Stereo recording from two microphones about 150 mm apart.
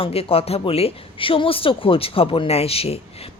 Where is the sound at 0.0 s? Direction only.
40° left (ahead or behind).